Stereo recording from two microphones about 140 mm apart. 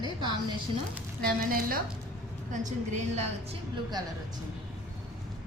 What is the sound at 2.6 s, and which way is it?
Speech, 60° right (ahead or behind).